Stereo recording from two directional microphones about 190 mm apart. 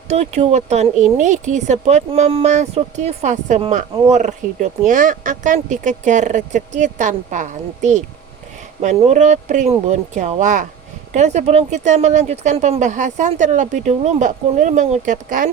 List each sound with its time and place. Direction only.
0.1 s speech: 35° right (ahead or behind)